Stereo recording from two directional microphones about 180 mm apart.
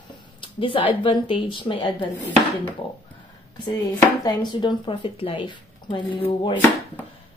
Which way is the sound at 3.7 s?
20° left (ahead or behind).